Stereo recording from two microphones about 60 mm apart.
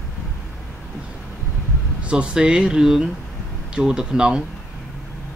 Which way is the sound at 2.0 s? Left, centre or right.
Centre.